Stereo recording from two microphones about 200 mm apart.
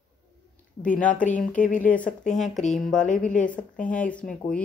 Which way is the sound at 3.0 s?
40° left (ahead or behind).